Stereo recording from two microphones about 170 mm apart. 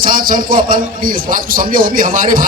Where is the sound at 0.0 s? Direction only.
55° right (ahead or behind).